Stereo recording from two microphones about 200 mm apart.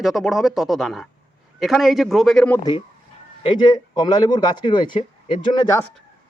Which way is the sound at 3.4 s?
20° left (ahead or behind).